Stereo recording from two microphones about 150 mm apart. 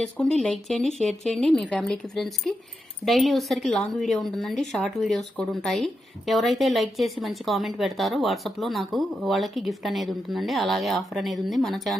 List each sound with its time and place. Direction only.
0.0 s a woman's voice: 5° left (ahead or behind)